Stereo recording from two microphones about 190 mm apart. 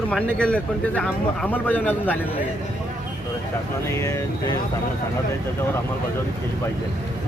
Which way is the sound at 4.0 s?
15° left (ahead or behind).